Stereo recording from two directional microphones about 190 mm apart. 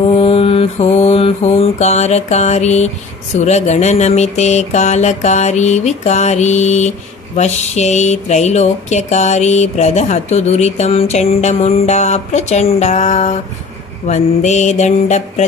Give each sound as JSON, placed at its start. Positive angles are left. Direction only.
{"t": 0.1, "sound": "mantra", "side_deg": 30}
{"t": 3.3, "sound": "speech", "side_deg": 35}